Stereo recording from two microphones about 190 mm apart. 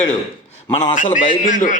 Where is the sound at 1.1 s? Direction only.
40° left (ahead or behind).